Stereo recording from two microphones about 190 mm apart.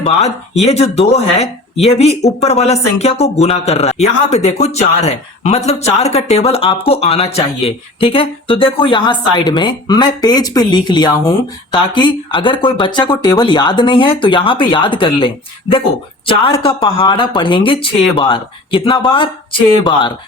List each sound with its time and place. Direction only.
0.0 s speech: 35° left (ahead or behind)